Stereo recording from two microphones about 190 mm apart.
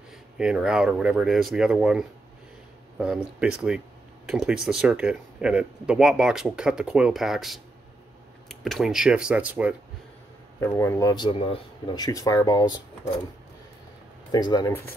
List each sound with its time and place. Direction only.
0.4 s speech: 5° right (ahead or behind)
4.3 s speech: centre (ahead or behind)
10.6 s speech: 10° left (ahead or behind)
14.3 s speech: 20° left (ahead or behind)